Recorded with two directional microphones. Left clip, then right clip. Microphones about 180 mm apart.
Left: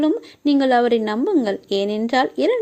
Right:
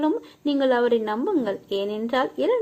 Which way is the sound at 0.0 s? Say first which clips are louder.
Left 4 dB; 35° left (ahead or behind).